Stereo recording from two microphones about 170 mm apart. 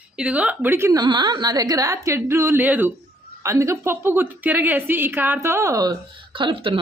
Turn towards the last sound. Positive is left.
turn(degrees=-30)  # may be behind; listen again after turning